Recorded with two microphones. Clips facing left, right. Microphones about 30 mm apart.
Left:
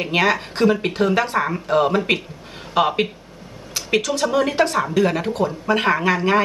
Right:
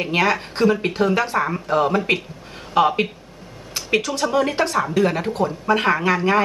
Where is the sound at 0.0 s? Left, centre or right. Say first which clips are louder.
Left 1 dB; centre.